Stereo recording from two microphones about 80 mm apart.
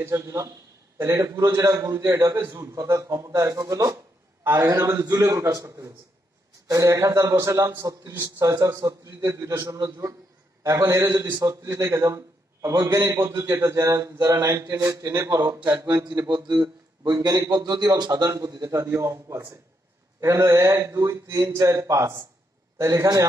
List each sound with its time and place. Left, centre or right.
0.0 s a man's voice: right
16.3 s a man's voice: right